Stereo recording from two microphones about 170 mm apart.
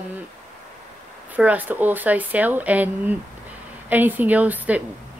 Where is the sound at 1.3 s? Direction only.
10° right (ahead or behind).